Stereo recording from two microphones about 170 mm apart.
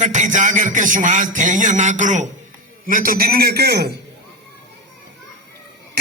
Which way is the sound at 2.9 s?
55° right (ahead or behind).